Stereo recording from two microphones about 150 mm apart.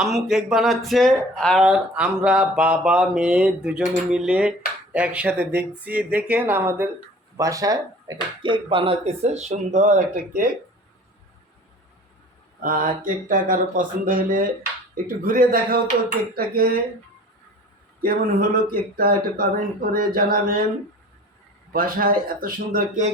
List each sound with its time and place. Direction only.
0.0 s speech: 5° right (ahead or behind); by 10.5 s 60° right (ahead or behind)
12.6 s speech: 65° right (ahead or behind)
16.3 s cutlery: 80° right
18.0 s speech: 75° right (ahead or behind)
21.7 s speech: 75° right (ahead or behind)